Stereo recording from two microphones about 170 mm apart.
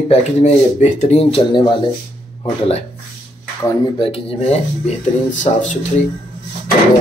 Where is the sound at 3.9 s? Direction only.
35° left (ahead or behind).